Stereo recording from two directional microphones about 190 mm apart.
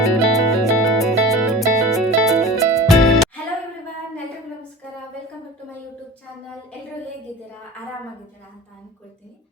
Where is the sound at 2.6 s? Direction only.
15° right (ahead or behind).